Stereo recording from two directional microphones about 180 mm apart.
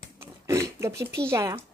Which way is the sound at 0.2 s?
15° right (ahead or behind).